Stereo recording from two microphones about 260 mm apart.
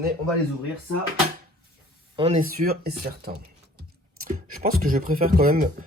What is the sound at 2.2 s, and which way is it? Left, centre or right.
Speech, right.